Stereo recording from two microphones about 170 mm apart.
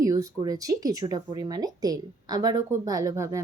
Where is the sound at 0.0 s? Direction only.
20° right (ahead or behind).